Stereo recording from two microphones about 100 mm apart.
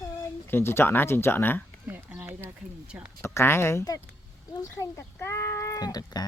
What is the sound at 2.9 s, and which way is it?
Speech, 15° right (ahead or behind).